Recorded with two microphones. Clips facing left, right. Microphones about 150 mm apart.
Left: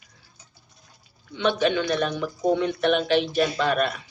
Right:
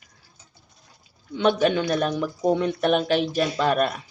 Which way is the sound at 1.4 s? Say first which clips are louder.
Right 2 dB; 45° right (ahead or behind).